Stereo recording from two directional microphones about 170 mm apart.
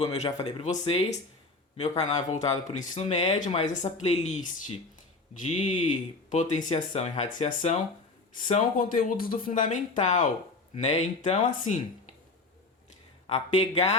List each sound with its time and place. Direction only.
0.0 s speech: 40° left (ahead or behind)
8.8 s speech: 55° left (ahead or behind)
13.2 s speech: 40° left (ahead or behind)